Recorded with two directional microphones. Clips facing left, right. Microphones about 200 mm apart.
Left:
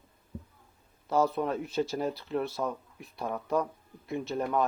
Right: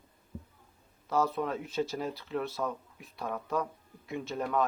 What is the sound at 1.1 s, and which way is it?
Speech, 35° left (ahead or behind).